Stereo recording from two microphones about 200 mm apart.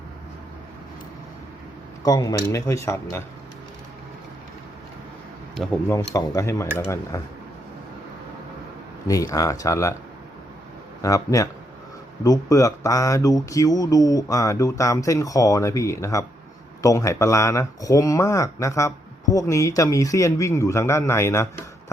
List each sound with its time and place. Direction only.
2.0 s speech: 20° left (ahead or behind)
5.5 s speech: 5° left (ahead or behind)
9.0 s speech: 15° left (ahead or behind)
11.0 s speech: 15° left (ahead or behind)